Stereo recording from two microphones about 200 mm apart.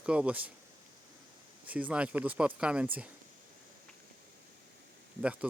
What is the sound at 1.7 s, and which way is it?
Speech, 5° right (ahead or behind).